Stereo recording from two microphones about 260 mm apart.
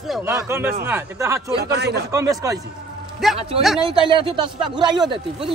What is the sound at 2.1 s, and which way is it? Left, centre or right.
Speech, centre.